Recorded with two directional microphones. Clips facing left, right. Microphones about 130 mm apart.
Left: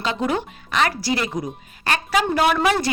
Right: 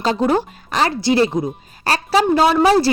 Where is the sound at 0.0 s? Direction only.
35° right (ahead or behind).